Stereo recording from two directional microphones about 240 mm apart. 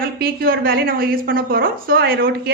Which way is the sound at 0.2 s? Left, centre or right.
Right.